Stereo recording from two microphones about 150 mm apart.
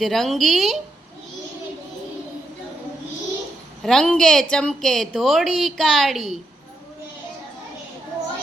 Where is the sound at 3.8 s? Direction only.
5° left (ahead or behind).